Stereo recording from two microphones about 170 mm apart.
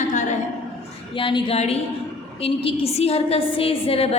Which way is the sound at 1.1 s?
30° left (ahead or behind).